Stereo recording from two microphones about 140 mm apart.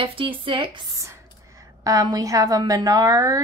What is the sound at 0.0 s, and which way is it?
Speech, 40° right (ahead or behind).